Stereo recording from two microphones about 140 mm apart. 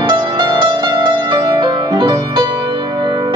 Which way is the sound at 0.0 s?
35° right (ahead or behind).